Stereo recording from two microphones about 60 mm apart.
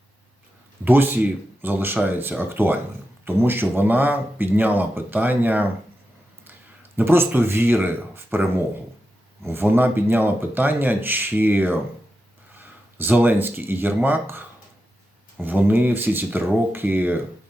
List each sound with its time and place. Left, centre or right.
0.9 s speech: right